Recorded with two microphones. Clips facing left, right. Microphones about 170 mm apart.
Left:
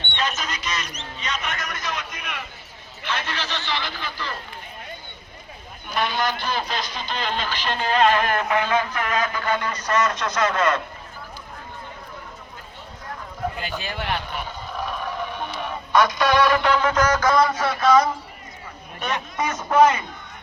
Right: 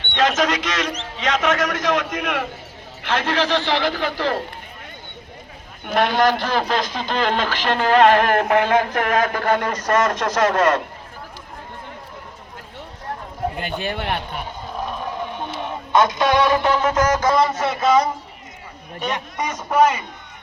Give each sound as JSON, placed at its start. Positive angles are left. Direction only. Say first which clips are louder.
{"t": 0.2, "sound": "a man's voice", "louder": "right 10 dB", "side_deg": -90}
{"t": 5.8, "sound": "a man's voice", "louder": "right 7 dB", "side_deg": -75}
{"t": 13.6, "sound": "a man's voice", "louder": "right 4 dB", "side_deg": -55}
{"t": 14.8, "sound": "music", "louder": "right 2 dB", "side_deg": -25}
{"t": 16.6, "sound": "a sound", "louder": "right 2 dB", "side_deg": -25}
{"t": 18.9, "sound": "a man's voice", "louder": "right 1 dB", "side_deg": -15}